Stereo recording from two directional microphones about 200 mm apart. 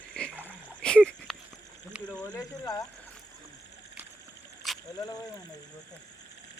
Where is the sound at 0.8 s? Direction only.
5° left (ahead or behind).